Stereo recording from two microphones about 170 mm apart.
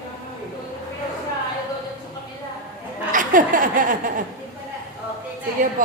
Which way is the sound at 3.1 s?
50° right (ahead or behind).